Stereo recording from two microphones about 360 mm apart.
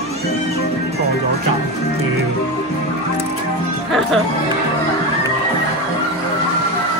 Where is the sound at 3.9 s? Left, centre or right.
Centre.